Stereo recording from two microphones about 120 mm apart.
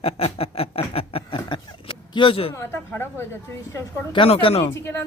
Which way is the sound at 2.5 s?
20° left (ahead or behind).